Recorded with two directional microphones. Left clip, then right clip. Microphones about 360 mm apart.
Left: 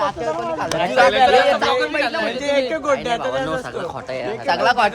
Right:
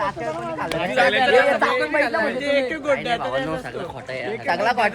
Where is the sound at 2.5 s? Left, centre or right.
Centre.